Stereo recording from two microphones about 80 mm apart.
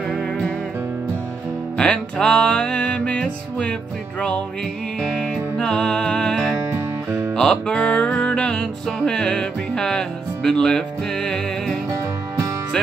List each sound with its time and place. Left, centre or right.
1.8 s music: centre
5.0 s music: centre
6.7 s music: right
7.3 s music: centre